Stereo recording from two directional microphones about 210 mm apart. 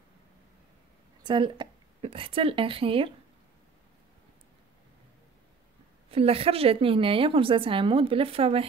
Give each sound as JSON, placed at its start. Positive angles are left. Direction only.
{"t": 1.2, "sound": "a woman's voice", "side_deg": -20}
{"t": 6.0, "sound": "a woman's voice", "side_deg": -30}